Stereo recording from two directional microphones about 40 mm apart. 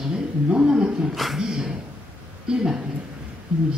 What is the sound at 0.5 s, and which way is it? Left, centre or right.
Speech, right.